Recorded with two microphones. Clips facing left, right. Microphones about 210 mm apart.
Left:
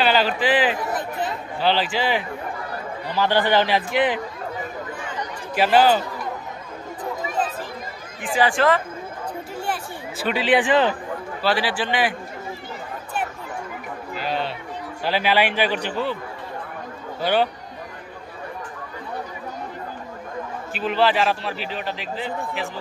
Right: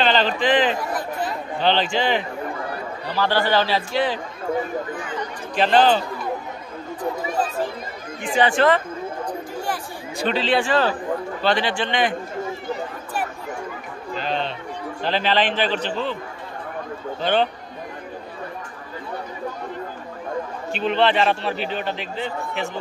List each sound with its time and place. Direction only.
0.0 s a man's voice: 10° left (ahead or behind)
3.2 s a man's voice: 15° left (ahead or behind)
5.6 s a man's voice: 10° left (ahead or behind)
8.2 s a man's voice: centre (ahead or behind)
10.2 s a man's voice: 15° left (ahead or behind)
11.4 s a man's voice: 5° left (ahead or behind)
14.1 s a sound: 10° left (ahead or behind)
15.0 s a man's voice: 10° left (ahead or behind)
17.2 s a man's voice: 10° left (ahead or behind)
20.7 s a man's voice: 5° left (ahead or behind)